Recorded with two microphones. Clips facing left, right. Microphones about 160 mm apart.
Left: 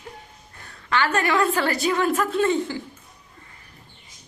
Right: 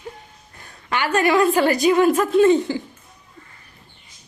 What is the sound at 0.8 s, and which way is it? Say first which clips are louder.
A woman's voice: right 3 dB; 15° right (ahead or behind).